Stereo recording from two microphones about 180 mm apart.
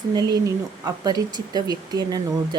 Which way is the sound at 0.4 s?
20° right (ahead or behind).